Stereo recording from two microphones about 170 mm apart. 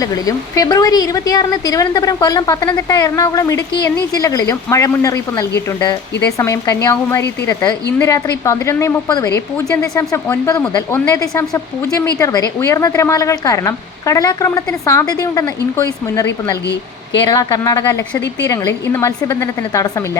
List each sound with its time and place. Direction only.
0.0 s a woman's voice: 20° left (ahead or behind)
17.2 s a woman's voice: 20° left (ahead or behind)